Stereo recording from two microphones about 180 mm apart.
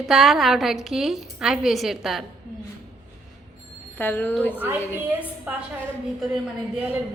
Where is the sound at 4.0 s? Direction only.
10° left (ahead or behind).